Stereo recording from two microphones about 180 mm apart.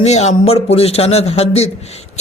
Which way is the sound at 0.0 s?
40° left (ahead or behind).